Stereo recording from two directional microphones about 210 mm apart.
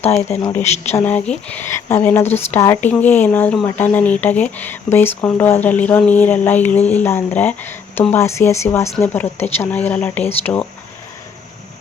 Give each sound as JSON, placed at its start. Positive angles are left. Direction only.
{"t": 0.2, "sound": "speech", "side_deg": 30}
{"t": 0.9, "sound": "speech", "side_deg": 10}